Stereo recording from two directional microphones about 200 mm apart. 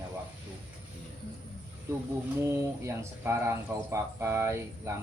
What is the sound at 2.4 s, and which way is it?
Speech, 15° right (ahead or behind).